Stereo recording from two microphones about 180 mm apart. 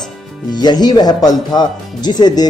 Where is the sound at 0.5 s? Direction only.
25° left (ahead or behind).